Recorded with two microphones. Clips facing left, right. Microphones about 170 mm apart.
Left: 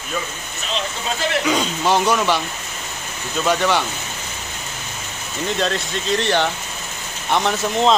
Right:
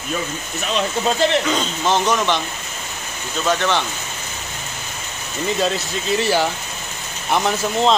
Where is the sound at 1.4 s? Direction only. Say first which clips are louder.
Left 1 dB; 10° left (ahead or behind).